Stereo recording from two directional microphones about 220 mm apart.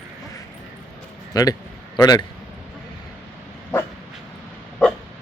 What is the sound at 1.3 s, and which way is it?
Speech, 15° left (ahead or behind).